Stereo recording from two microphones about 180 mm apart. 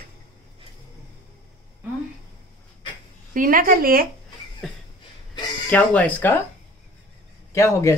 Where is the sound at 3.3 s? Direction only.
50° right (ahead or behind).